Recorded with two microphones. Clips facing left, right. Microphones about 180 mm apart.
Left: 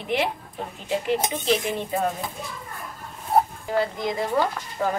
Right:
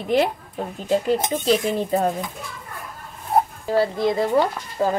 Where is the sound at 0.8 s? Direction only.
40° right (ahead or behind).